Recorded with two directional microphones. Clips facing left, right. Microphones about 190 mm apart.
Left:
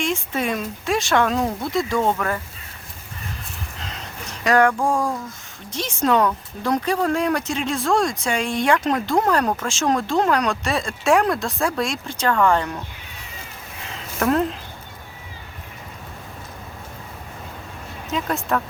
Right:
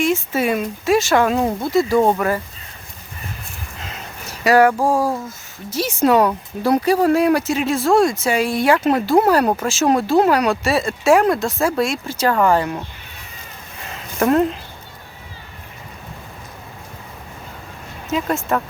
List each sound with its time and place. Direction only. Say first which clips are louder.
0.0 s speech: right 5 dB; 5° right (ahead or behind)
1.8 s speech: right 7 dB; 35° right (ahead or behind)
2.0 s speech: right 5 dB; 10° right (ahead or behind)
3.8 s a sound: right 2 dB; 5° right (ahead or behind)
5.7 s speech: right 4 dB; 5° right (ahead or behind)
14.2 s speech: right 4 dB; 5° right (ahead or behind)
18.1 s speech: right 3 dB; centre (ahead or behind)